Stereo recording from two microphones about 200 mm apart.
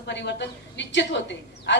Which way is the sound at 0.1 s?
60° left (ahead or behind).